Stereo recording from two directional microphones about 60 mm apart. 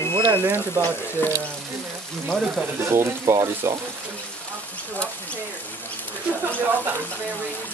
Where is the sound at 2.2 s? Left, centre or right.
Centre.